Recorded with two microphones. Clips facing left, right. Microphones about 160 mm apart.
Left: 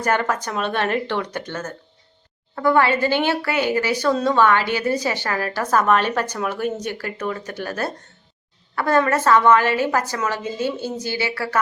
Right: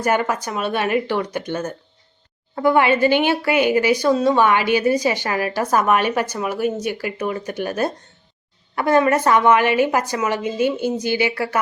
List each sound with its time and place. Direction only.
0.0 s a woman's voice: 10° right (ahead or behind)